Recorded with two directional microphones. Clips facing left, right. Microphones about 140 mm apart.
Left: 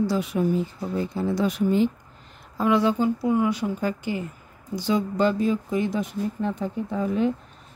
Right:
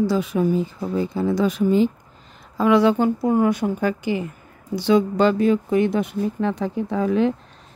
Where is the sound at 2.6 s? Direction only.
85° right; by 3.1 s 70° right (ahead or behind).